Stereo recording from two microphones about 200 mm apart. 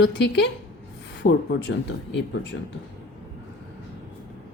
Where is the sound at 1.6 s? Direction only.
60° left (ahead or behind).